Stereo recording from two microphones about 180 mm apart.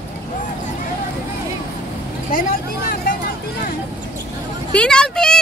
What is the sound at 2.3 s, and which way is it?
Vehicle, 50° left (ahead or behind).